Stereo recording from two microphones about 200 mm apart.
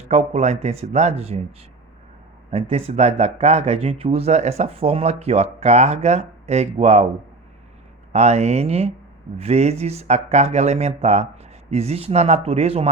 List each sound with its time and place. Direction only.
0.1 s speech: 30° right (ahead or behind)
2.5 s speech: 30° right (ahead or behind)
8.1 s speech: 30° right (ahead or behind)